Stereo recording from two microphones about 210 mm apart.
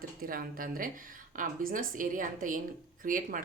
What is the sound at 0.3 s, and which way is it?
A woman's voice, 40° right (ahead or behind).